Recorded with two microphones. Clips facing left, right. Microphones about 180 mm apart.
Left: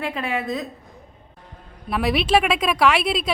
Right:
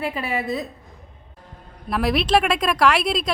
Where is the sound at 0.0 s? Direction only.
5° right (ahead or behind).